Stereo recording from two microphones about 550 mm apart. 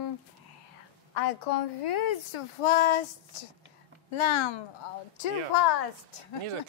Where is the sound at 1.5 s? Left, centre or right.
Left.